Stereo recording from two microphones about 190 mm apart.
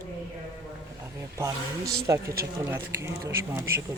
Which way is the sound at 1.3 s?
15° right (ahead or behind).